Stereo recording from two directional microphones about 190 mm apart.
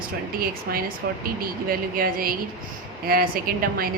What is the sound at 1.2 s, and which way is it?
A woman's voice, 50° right (ahead or behind).